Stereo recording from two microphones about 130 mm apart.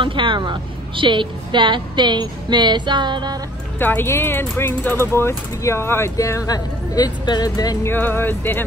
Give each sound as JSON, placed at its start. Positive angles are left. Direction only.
{"t": 0.0, "sound": "a woman's voice", "side_deg": -40}
{"t": 3.8, "sound": "speech", "side_deg": 15}
{"t": 7.9, "sound": "speech", "side_deg": 15}